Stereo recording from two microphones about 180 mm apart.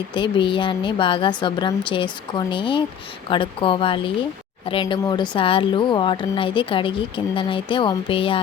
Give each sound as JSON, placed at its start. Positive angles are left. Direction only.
{"t": 0.1, "sound": "a woman's voice", "side_deg": 25}